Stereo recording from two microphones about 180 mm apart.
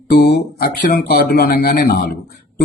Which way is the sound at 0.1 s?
60° left (ahead or behind).